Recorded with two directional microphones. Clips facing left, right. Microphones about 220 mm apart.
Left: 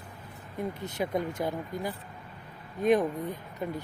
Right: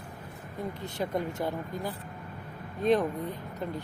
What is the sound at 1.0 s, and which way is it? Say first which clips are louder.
Speech: left 1 dB; 10° left (ahead or behind).